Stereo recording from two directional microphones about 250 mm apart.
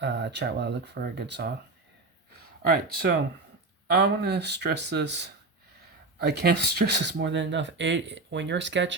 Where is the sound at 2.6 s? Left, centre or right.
Right.